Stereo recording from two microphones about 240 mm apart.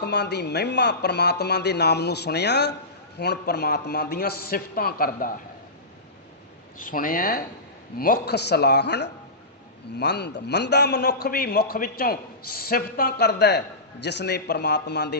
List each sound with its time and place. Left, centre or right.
0.0 s a man's voice: left
6.7 s a man's voice: left